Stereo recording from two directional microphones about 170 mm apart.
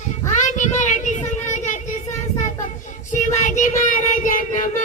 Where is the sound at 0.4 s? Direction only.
45° left (ahead or behind).